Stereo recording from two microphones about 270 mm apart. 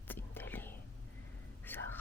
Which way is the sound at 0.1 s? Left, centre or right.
Centre.